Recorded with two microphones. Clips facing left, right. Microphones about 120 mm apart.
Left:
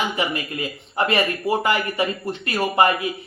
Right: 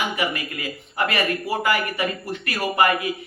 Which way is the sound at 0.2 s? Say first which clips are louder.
Left 2 dB; 25° left (ahead or behind).